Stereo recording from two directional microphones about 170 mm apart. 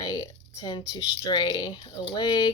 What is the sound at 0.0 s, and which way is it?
Speech, 25° left (ahead or behind).